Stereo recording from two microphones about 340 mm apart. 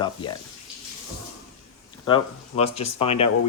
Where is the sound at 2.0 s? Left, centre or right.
Centre.